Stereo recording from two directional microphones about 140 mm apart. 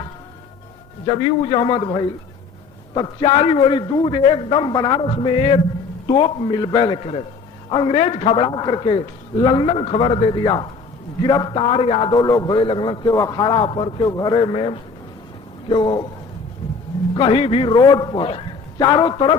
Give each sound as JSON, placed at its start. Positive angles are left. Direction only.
{"t": 1.0, "sound": "a man's voice", "side_deg": 40}
{"t": 12.1, "sound": "a man's voice", "side_deg": 25}
{"t": 14.0, "sound": "a man's voice", "side_deg": 30}
{"t": 17.2, "sound": "a man's voice", "side_deg": 40}